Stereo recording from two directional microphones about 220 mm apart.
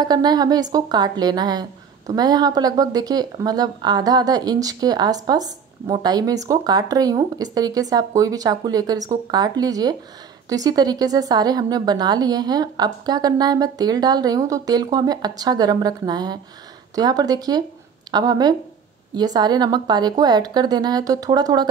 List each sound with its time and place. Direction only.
0.0 s speech: 20° right (ahead or behind)